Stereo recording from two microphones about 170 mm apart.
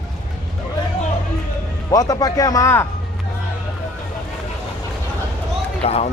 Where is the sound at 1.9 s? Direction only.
20° left (ahead or behind).